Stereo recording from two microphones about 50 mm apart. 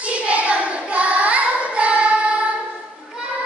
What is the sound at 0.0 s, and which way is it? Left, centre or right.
Child singing, right.